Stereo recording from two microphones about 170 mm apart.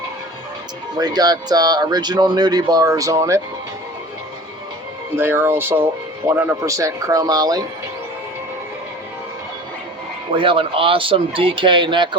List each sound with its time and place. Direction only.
0.9 s speech: 25° right (ahead or behind)
5.1 s speech: 15° right (ahead or behind)
10.3 s speech: 30° right (ahead or behind)